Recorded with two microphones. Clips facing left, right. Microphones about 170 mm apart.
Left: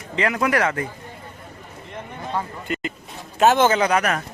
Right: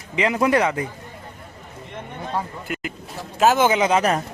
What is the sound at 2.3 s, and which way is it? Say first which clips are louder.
A man's voice: left 1 dB; 5° right (ahead or behind).